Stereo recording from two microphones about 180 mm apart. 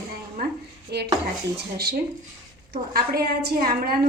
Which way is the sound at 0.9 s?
65° right (ahead or behind).